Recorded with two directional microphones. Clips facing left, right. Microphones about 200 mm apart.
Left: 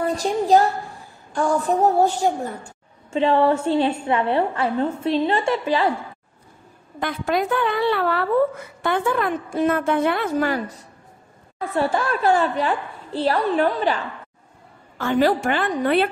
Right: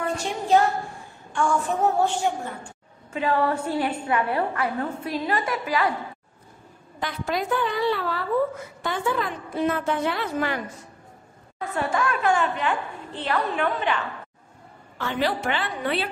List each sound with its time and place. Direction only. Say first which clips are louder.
0.0 s a woman's voice: left 6 dB; 35° left (ahead or behind)
3.1 s a woman's voice: left 6 dB; 25° left (ahead or behind)
7.0 s a woman's voice: left 5 dB; 55° left (ahead or behind)
10.3 s a woman's voice: left 5 dB; 35° left (ahead or behind)
11.7 s a woman's voice: left 4 dB; 30° left (ahead or behind)
15.0 s a woman's voice: left 7 dB; 45° left (ahead or behind)